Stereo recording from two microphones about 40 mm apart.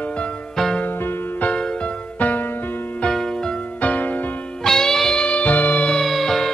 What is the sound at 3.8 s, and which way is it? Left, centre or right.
Music, left.